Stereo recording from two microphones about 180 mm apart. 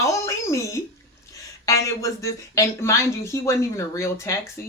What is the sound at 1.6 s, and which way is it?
Speech, 15° left (ahead or behind).